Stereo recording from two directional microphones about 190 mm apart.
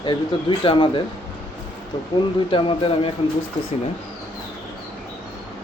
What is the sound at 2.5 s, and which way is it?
Speech, 25° left (ahead or behind).